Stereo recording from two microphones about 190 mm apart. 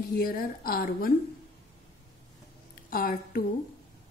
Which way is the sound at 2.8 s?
50° left (ahead or behind).